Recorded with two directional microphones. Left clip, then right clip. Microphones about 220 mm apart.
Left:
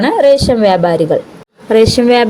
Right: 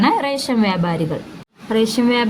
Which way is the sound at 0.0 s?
15° left (ahead or behind).